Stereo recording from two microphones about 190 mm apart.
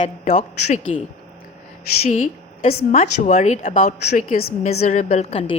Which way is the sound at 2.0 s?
35° left (ahead or behind).